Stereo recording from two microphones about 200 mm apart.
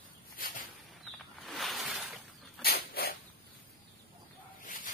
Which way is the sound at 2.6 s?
50° left (ahead or behind).